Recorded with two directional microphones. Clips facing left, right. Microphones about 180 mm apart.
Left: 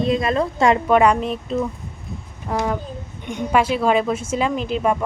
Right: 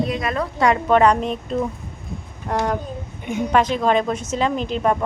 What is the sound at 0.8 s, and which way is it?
A woman's voice, 10° left (ahead or behind).